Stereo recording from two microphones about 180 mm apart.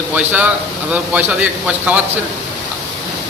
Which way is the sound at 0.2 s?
10° right (ahead or behind).